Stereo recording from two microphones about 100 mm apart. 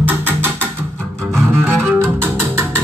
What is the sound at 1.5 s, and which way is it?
Cello, 25° right (ahead or behind).